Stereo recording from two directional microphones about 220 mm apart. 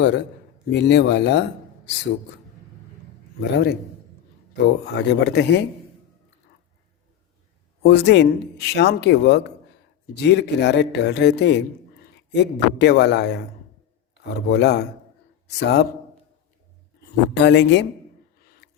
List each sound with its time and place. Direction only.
0.0 s a man's voice: 50° left (ahead or behind)
4.6 s a man's voice: 50° left (ahead or behind)
7.8 s a man's voice: 50° left (ahead or behind)
14.4 s a man's voice: 50° left (ahead or behind)
17.3 s a man's voice: 50° left (ahead or behind)